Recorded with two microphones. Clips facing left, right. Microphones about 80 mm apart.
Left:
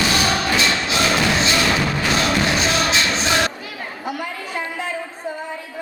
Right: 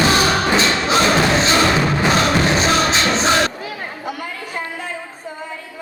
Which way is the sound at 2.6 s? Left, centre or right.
Right.